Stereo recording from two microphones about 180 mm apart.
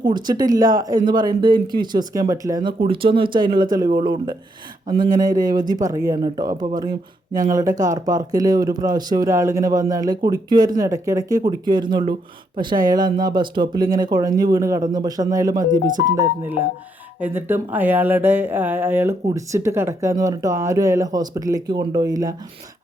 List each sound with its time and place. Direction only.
0.0 s speech: 25° right (ahead or behind)
3.8 s speech: 50° right (ahead or behind)
4.9 s speech: 25° right (ahead or behind)
7.8 s speech: 20° right (ahead or behind)